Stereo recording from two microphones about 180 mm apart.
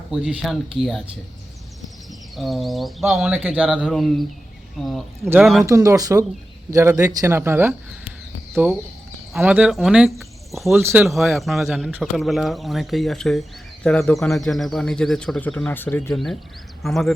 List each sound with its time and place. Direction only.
0.1 s speech: 5° right (ahead or behind)
2.3 s speech: centre (ahead or behind)
5.6 s speech: 20° right (ahead or behind); by 10.8 s centre (ahead or behind)
10.8 s speech: 15° right (ahead or behind)
11.0 s speech: centre (ahead or behind)